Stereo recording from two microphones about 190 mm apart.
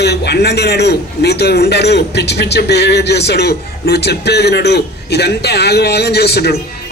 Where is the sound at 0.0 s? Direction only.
60° left (ahead or behind).